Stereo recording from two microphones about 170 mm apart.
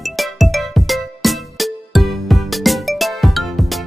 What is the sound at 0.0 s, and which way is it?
Music, centre (ahead or behind).